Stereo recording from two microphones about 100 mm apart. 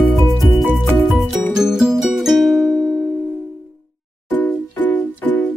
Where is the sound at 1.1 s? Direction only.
5° right (ahead or behind).